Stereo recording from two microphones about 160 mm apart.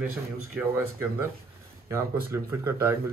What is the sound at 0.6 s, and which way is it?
Speech, 15° right (ahead or behind).